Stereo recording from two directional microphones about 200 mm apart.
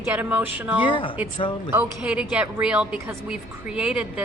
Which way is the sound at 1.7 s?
5° right (ahead or behind).